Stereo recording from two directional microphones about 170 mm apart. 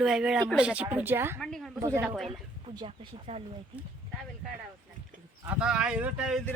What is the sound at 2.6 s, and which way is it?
Speech, 30° right (ahead or behind).